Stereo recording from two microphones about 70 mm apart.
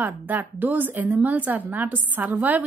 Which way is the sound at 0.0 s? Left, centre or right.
Right.